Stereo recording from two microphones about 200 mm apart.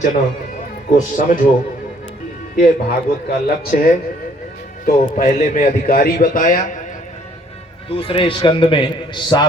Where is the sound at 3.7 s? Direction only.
45° left (ahead or behind).